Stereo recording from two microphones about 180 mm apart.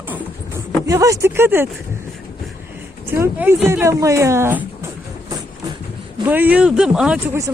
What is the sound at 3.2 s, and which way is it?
Speech, 10° right (ahead or behind).